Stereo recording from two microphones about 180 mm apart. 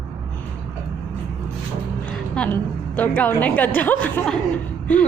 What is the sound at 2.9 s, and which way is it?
A woman's voice, 10° left (ahead or behind).